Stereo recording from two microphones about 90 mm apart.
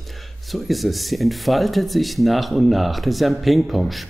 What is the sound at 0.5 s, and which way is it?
Speech, centre (ahead or behind).